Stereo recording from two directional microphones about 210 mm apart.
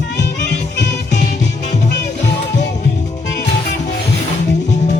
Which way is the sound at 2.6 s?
55° left (ahead or behind).